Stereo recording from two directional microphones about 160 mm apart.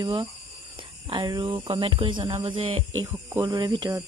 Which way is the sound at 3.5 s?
30° right (ahead or behind).